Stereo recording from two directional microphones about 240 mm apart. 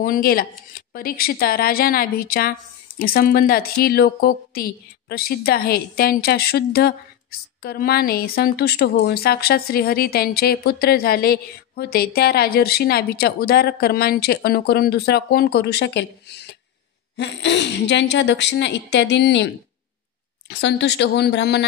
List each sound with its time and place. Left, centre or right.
0.0 s a woman's voice: left